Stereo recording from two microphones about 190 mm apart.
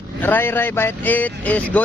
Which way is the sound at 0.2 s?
10° left (ahead or behind).